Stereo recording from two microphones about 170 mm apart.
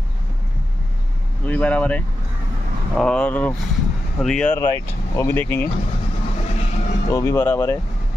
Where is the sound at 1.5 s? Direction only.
10° left (ahead or behind).